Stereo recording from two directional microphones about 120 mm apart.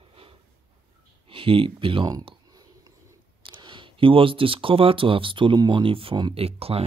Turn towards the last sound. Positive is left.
turn(degrees=-55)  # may be behind; listen again after turning